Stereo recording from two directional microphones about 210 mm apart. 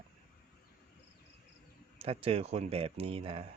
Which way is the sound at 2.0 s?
25° right (ahead or behind).